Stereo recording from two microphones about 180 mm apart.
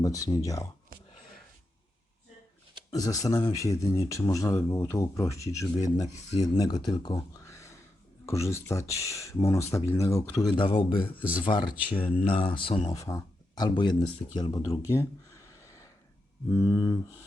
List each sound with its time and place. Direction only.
0.0 s speech: 20° left (ahead or behind)
2.9 s speech: 20° left (ahead or behind)
12.9 s speech: 20° left (ahead or behind)
14.9 s a sound: 15° left (ahead or behind)
16.5 s speech: 20° left (ahead or behind)